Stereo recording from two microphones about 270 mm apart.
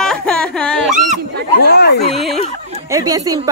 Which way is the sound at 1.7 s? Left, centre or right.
Left.